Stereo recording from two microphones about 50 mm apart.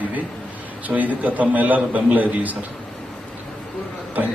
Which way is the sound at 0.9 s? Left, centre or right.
Right.